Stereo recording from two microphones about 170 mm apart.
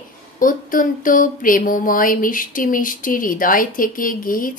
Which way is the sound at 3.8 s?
55° left (ahead or behind).